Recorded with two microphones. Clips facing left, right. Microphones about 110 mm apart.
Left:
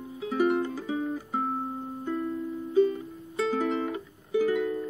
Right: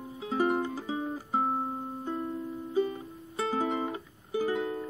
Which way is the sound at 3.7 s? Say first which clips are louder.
Left 3 dB; 25° right (ahead or behind).